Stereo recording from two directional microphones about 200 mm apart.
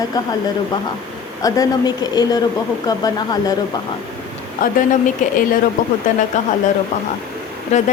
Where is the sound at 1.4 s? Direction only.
20° left (ahead or behind).